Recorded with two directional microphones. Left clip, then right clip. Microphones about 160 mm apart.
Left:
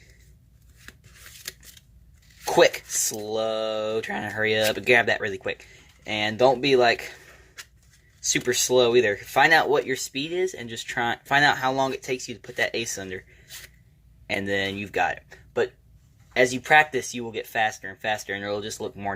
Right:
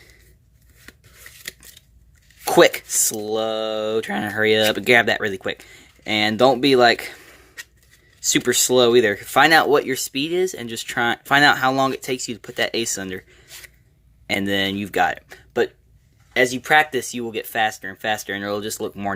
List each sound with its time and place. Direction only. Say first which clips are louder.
2.4 s a sound: right 4 dB; 40° right (ahead or behind)
3.1 s speech: right 2 dB; 35° right (ahead or behind)
8.2 s speech: right 5 dB; 40° right (ahead or behind)
16.3 s speech: right 2 dB; 30° right (ahead or behind)